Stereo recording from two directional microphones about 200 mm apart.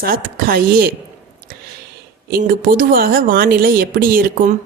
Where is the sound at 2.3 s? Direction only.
45° right (ahead or behind).